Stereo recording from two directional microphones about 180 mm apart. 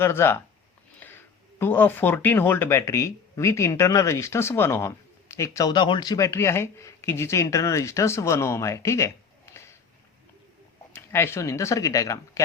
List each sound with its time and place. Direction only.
0.0 s speech: 15° left (ahead or behind)
10.9 s speech: 15° left (ahead or behind)